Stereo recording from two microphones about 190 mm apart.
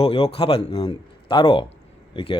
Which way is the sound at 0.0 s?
30° left (ahead or behind).